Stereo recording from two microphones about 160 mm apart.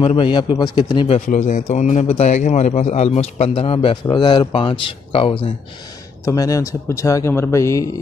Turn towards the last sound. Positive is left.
turn(degrees=20)  # may be behind; listen again after turning